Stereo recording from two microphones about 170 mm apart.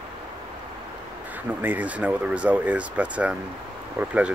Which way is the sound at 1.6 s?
10° right (ahead or behind).